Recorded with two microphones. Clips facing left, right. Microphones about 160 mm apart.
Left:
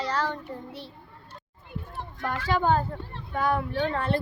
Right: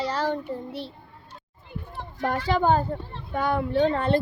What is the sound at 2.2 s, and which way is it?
Speech, 35° right (ahead or behind).